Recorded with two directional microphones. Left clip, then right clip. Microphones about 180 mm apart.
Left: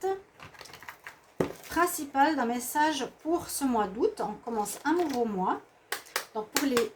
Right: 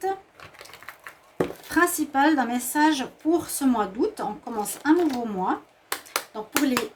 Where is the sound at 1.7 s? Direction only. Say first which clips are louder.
Right 6 dB; 50° right (ahead or behind).